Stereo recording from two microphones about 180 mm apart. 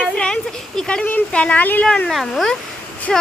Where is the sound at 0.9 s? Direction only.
5° left (ahead or behind).